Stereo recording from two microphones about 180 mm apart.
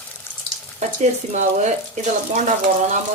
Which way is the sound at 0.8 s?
40° right (ahead or behind).